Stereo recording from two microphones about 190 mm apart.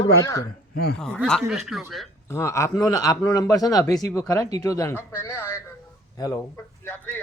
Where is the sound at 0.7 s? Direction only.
55° left (ahead or behind).